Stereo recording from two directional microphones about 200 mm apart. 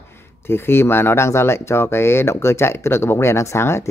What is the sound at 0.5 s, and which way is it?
Speech, 10° left (ahead or behind).